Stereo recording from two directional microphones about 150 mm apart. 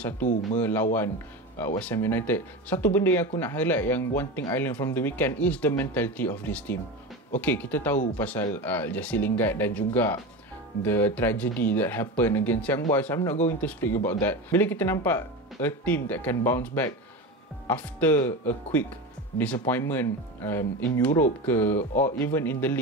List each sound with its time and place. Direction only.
0.6 s speech: 15° left (ahead or behind)